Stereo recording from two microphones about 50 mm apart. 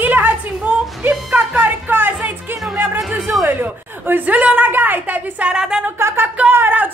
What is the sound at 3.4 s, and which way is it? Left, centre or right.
Speech, right.